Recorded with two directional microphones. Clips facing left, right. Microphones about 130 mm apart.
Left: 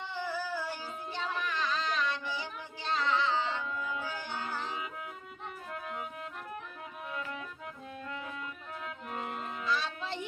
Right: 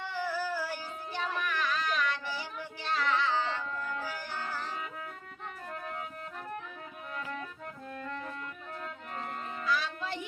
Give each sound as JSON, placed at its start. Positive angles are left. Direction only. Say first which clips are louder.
{"t": 0.1, "sound": "music", "louder": "right 2 dB", "side_deg": 25}
{"t": 8.8, "sound": "music", "louder": "left 2 dB", "side_deg": 5}
{"t": 9.6, "sound": "music", "louder": "right 1 dB", "side_deg": 25}